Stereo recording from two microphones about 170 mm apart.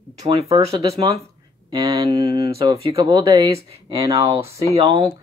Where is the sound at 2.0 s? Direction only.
35° right (ahead or behind).